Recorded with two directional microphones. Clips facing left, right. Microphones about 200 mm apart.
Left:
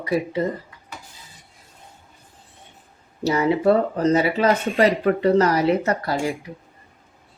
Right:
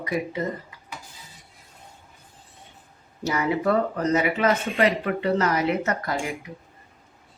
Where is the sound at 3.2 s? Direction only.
30° left (ahead or behind).